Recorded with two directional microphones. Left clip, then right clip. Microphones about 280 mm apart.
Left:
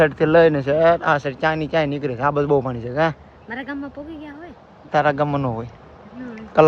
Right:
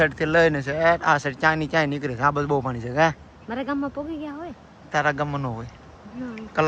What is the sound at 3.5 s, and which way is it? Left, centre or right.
Speech, centre.